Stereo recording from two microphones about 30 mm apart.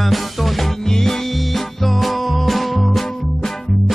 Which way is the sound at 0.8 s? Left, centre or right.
Centre.